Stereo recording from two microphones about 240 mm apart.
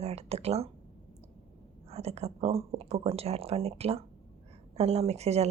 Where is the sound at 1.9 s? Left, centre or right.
Right.